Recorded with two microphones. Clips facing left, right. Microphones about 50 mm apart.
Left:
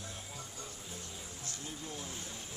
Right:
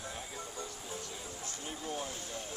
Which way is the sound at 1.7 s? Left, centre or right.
Right.